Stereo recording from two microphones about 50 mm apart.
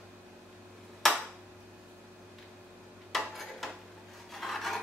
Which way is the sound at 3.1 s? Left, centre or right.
Centre.